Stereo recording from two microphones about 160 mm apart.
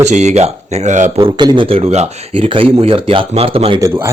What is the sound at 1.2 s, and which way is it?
Speech, 30° right (ahead or behind).